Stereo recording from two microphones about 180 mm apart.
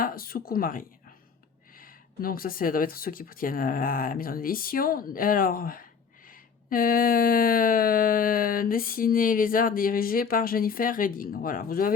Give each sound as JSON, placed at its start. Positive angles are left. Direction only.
{"t": 0.0, "sound": "speech", "side_deg": 55}